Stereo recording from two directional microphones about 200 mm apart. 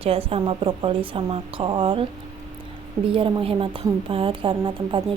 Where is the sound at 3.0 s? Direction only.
25° right (ahead or behind).